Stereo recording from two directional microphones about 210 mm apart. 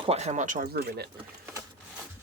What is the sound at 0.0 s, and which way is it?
Speech, 30° right (ahead or behind).